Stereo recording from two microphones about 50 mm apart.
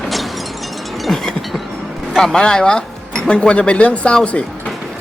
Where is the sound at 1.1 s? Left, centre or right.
Centre.